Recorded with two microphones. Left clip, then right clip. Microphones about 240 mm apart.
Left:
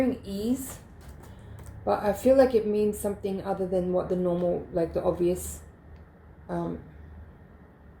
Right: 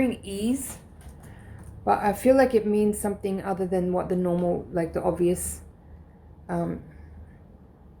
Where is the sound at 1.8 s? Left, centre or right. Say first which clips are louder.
Right 2 dB; right.